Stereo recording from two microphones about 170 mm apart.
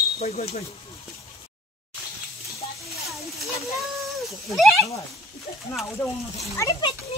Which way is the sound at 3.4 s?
Centre (ahead or behind).